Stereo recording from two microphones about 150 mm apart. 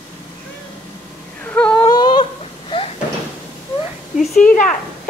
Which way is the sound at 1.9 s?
30° left (ahead or behind).